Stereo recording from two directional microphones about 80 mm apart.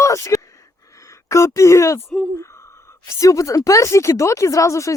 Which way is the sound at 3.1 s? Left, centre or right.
Left.